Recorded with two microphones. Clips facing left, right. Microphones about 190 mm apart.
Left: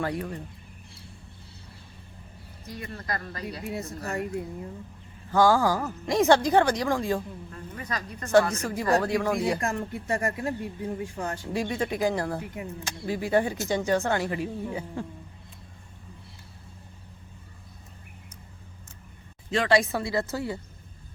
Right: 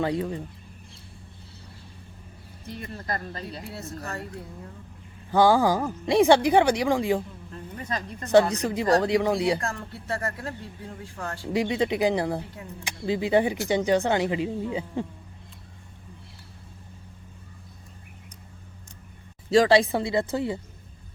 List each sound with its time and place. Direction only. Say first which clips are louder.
0.0 s speech: right 4 dB; 20° right (ahead or behind)
2.6 s speech: right 1 dB; 25° right (ahead or behind)
3.6 s speech: left 3 dB; 15° left (ahead or behind)
5.3 s speech: right 2 dB; 15° right (ahead or behind)
9.6 s speech: left 3 dB; 15° left (ahead or behind)
11.4 s speech: right 6 dB; 15° right (ahead or behind)
19.5 s speech: right 5 dB; 35° right (ahead or behind)